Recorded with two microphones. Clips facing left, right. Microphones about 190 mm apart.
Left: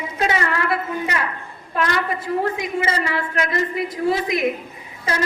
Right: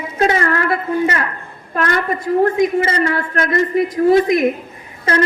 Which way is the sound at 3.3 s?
50° right (ahead or behind).